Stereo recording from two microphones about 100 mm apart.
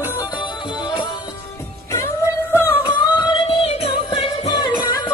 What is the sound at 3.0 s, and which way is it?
Music, 50° left (ahead or behind).